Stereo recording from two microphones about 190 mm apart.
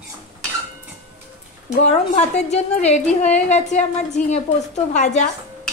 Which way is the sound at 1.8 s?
35° left (ahead or behind).